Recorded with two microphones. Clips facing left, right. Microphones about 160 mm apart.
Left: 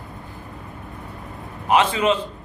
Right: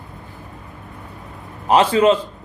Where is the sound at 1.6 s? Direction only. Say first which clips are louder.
Right 5 dB; 35° right (ahead or behind).